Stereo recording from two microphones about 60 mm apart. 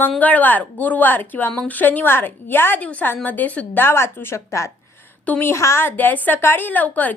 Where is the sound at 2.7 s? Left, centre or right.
Left.